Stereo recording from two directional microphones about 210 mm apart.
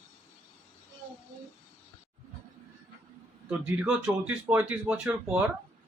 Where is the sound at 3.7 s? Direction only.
10° right (ahead or behind).